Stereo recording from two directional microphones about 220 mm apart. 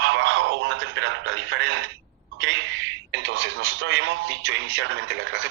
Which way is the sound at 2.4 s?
55° right (ahead or behind).